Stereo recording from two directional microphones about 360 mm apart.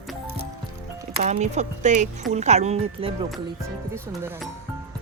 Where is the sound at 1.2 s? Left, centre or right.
Centre.